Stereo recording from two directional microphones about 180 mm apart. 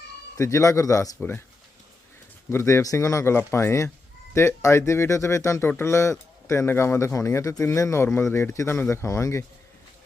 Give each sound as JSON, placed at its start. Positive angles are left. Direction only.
{"t": 0.3, "sound": "speech", "side_deg": 15}
{"t": 2.5, "sound": "speech", "side_deg": 15}